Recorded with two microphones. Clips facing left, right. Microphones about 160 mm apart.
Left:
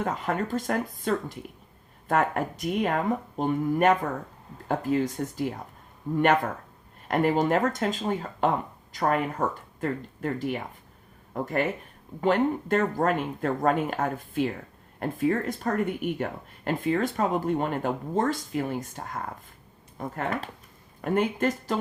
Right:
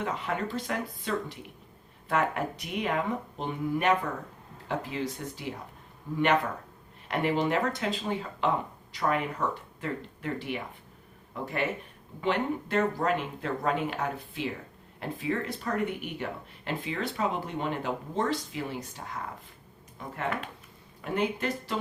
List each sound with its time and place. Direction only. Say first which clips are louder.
0.0 s speech: left 3 dB; 45° left (ahead or behind)